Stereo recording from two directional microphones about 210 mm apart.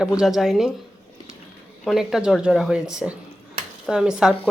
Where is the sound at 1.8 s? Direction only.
Centre (ahead or behind).